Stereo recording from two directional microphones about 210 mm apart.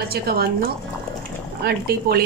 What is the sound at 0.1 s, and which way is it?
A woman's voice, 45° right (ahead or behind).